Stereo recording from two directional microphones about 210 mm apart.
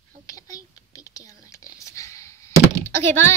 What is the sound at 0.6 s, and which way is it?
Whispering, 15° left (ahead or behind).